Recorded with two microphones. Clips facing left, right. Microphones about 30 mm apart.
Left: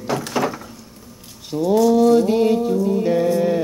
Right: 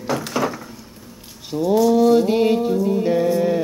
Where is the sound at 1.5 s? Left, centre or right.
Centre.